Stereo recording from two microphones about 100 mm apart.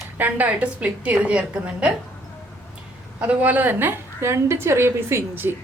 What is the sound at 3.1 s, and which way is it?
A woman's voice, 15° right (ahead or behind).